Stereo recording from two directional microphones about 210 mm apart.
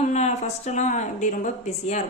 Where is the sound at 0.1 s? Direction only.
35° left (ahead or behind).